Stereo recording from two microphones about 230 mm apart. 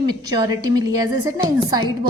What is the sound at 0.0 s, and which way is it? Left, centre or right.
A woman's voice, centre.